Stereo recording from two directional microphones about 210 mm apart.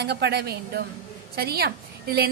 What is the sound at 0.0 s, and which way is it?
A woman's voice, 50° right (ahead or behind).